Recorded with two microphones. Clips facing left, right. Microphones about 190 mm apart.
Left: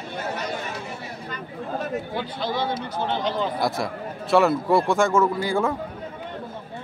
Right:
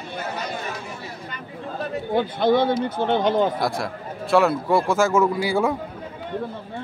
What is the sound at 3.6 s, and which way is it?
A man's voice, centre (ahead or behind).